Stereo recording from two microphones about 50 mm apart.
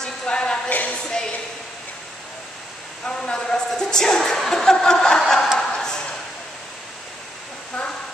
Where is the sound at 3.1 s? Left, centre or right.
Centre.